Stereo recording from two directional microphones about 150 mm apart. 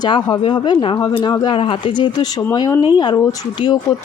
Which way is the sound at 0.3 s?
30° left (ahead or behind).